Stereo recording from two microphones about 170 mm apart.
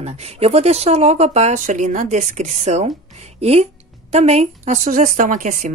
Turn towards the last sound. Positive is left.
turn(degrees=-50)  # may be behind; listen again after turning